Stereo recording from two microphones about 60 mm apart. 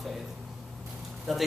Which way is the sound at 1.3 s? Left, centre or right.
Centre.